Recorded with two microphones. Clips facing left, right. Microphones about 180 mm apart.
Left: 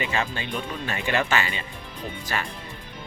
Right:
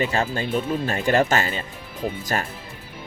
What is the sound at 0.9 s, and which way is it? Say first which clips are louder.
Speech: right 4 dB; 40° right (ahead or behind).